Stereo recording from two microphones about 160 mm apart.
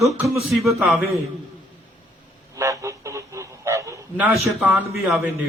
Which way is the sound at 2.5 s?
20° right (ahead or behind).